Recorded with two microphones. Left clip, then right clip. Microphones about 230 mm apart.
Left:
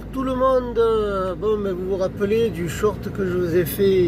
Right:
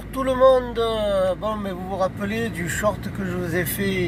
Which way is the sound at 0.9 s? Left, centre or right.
Right.